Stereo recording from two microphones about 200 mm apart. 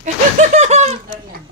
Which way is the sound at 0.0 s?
35° right (ahead or behind).